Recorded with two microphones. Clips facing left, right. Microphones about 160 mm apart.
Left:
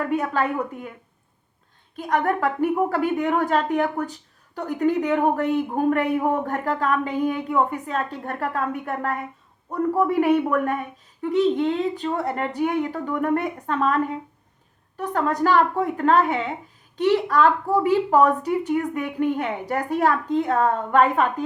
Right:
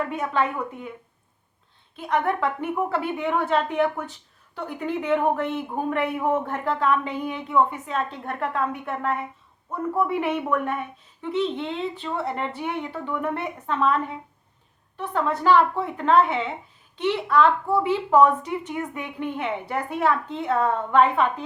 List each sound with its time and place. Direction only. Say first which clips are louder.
0.1 s a woman's voice: left 2 dB; 40° left (ahead or behind)
2.0 s a woman's voice: left 2 dB; 40° left (ahead or behind)